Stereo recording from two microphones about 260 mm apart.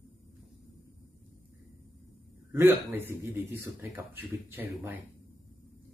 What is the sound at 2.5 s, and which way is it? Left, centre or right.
Speech, centre.